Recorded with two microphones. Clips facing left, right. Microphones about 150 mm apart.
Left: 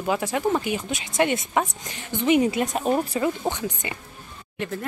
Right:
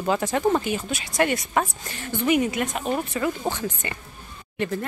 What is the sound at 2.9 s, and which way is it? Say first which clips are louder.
Speech: left 3 dB; 20° left (ahead or behind).